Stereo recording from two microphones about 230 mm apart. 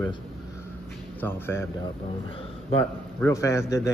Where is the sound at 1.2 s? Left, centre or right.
Centre.